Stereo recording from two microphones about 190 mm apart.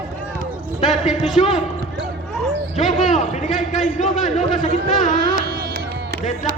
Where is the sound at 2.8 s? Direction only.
Centre (ahead or behind).